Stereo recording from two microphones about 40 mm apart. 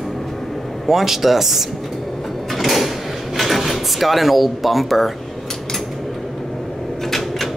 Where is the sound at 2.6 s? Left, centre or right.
Centre.